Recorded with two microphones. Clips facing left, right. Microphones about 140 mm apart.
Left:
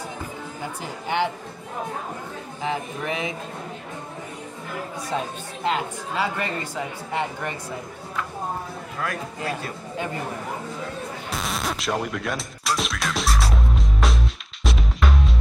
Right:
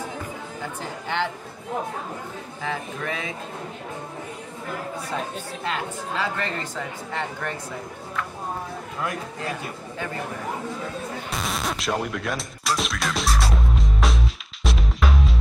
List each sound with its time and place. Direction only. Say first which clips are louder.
1.0 s speech: left 3 dB; 15° left (ahead or behind)
2.6 s speech: left 2 dB; 20° left (ahead or behind)
5.6 s speech: left 5 dB; 15° left (ahead or behind)
9.0 s speech: left 1 dB; 20° right (ahead or behind)
11.2 s music: left 1 dB; centre (ahead or behind)